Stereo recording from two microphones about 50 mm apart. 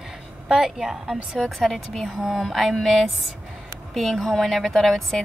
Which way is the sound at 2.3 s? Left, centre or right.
Centre.